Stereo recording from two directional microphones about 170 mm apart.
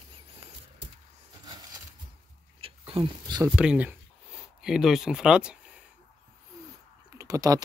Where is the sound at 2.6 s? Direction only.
30° right (ahead or behind).